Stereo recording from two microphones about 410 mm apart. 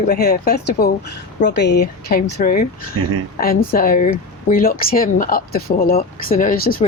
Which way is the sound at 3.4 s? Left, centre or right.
Left.